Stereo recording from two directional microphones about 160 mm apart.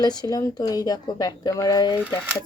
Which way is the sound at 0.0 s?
25° left (ahead or behind).